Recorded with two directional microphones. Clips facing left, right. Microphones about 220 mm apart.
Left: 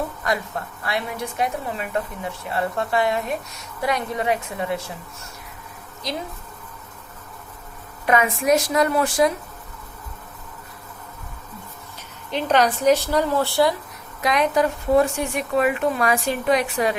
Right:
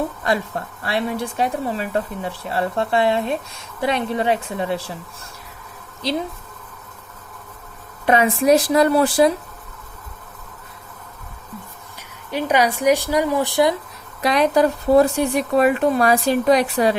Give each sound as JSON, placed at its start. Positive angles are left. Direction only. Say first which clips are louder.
{"t": 0.3, "sound": "a woman's voice", "louder": "right 3 dB", "side_deg": -30}
{"t": 6.0, "sound": "speech", "louder": "right 6 dB", "side_deg": -30}
{"t": 8.0, "sound": "speech", "louder": "right 4 dB", "side_deg": -30}
{"t": 12.3, "sound": "a woman's voice", "louder": "right 1 dB", "side_deg": -10}
{"t": 14.2, "sound": "speech", "louder": "right 3 dB", "side_deg": -35}